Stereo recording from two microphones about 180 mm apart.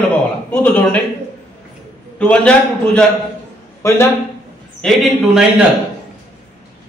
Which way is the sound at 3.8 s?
15° left (ahead or behind).